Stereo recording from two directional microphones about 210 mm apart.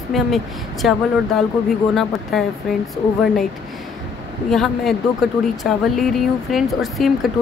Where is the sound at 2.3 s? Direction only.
Centre (ahead or behind).